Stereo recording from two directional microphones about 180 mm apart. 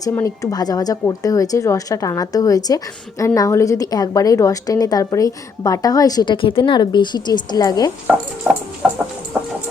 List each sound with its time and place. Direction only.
0.1 s a woman's voice: 20° left (ahead or behind)
8.5 s chicken: centre (ahead or behind)